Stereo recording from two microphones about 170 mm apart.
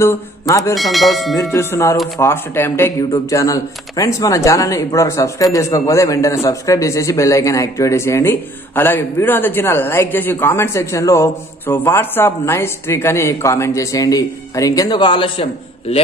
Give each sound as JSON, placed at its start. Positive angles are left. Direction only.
{"t": 0.0, "sound": "speech", "side_deg": 15}
{"t": 0.7, "sound": "speech", "side_deg": 0}
{"t": 1.4, "sound": "speech", "side_deg": 15}